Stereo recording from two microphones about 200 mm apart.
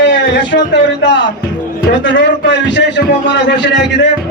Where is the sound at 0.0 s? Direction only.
65° left (ahead or behind).